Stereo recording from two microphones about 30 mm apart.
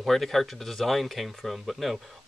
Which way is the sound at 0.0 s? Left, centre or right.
Centre.